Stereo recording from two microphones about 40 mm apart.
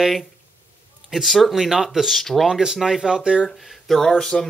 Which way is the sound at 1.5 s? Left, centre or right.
Centre.